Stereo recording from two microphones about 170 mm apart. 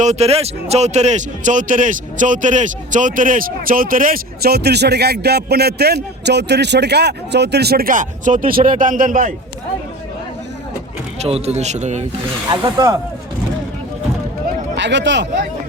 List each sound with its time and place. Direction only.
0.0 s a man's voice: 40° right (ahead or behind)
11.2 s a man's voice: 35° right (ahead or behind)
12.5 s speech: 25° right (ahead or behind)
14.8 s speech: 90° right